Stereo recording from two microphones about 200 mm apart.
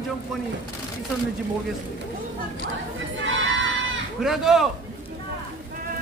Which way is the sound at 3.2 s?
70° right (ahead or behind).